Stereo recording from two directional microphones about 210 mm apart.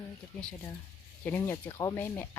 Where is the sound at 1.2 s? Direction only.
15° left (ahead or behind).